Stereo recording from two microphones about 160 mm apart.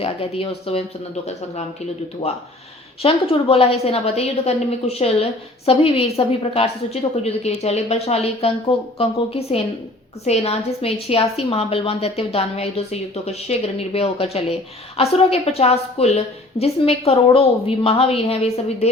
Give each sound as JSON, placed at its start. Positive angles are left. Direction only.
{"t": 0.0, "sound": "a woman's voice", "side_deg": 35}
{"t": 3.0, "sound": "a woman's voice", "side_deg": 35}